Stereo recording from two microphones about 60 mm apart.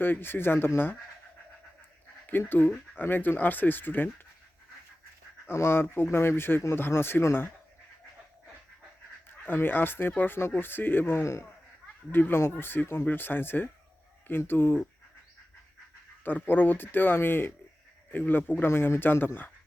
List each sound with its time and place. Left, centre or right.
0.0 s speech: left
3.0 s speech: left
5.5 s speech: left
9.5 s speech: left
16.2 s speech: left